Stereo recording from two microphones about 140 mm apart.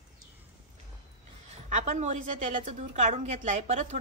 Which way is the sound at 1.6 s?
65° right (ahead or behind).